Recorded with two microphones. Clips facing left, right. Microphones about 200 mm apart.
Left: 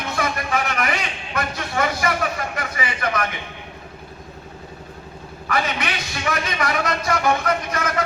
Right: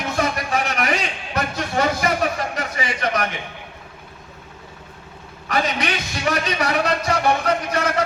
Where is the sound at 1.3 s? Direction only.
35° right (ahead or behind).